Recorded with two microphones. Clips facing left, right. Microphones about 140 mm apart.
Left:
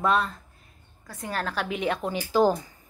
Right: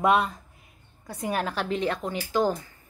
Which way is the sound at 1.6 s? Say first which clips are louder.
Even; 10° left (ahead or behind).